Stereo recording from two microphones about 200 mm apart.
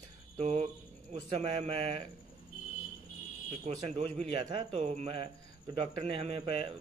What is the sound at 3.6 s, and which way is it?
A man's voice, 30° right (ahead or behind).